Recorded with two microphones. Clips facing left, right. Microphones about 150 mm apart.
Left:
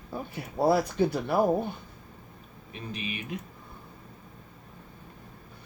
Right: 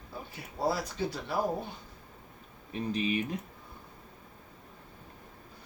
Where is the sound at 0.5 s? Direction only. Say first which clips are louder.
Left 8 dB; 55° left (ahead or behind).